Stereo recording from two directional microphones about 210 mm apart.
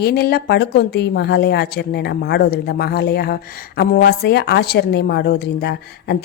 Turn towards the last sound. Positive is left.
turn(degrees=50)  # may be behind; listen again after turning